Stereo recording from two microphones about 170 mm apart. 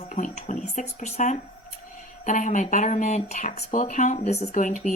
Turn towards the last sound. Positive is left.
turn(degrees=50)  # may be behind; listen again after turning